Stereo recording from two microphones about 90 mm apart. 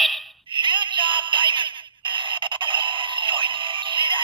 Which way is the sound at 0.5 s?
65° right (ahead or behind).